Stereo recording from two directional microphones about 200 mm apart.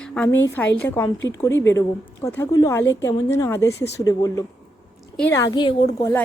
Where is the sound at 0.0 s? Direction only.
5° left (ahead or behind).